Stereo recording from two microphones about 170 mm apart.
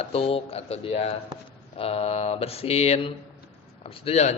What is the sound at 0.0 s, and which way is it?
A man's voice, 35° left (ahead or behind).